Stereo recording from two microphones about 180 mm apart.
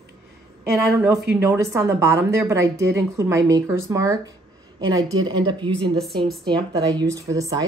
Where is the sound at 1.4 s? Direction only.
15° right (ahead or behind).